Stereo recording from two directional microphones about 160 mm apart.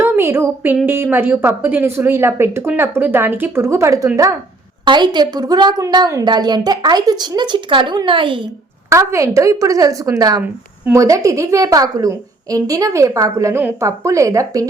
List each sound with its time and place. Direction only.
0.0 s a sound: 15° right (ahead or behind)
0.9 s a woman's voice: 15° right (ahead or behind); by 8.4 s 30° right (ahead or behind)
8.9 s a woman's voice: 20° right (ahead or behind)